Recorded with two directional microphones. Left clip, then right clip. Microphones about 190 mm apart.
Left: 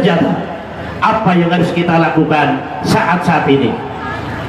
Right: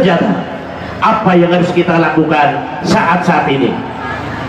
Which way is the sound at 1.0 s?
50° left (ahead or behind).